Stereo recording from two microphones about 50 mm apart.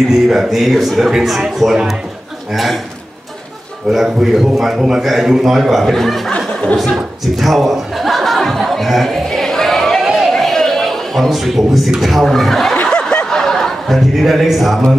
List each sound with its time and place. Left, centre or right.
0.3 s a man's voice: centre
3.9 s a man's voice: centre
6.3 s a sound: left
7.3 s a man's voice: centre
8.4 s chatter: centre
9.9 s a sound: centre
12.0 s a man's voice: centre
12.8 s snicker: centre
13.9 s a man's voice: centre